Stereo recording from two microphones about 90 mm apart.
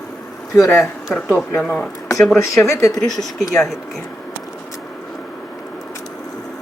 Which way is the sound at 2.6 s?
35° left (ahead or behind).